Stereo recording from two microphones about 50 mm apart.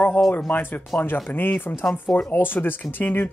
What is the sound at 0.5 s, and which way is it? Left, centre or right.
Speech, left.